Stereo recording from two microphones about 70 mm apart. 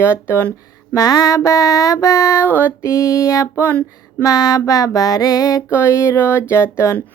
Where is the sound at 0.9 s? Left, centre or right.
Left.